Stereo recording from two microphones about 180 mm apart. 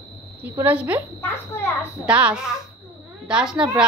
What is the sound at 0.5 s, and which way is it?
Speech, 10° right (ahead or behind).